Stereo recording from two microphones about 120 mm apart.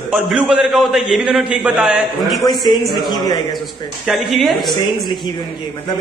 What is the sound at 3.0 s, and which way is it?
Speech, 35° left (ahead or behind).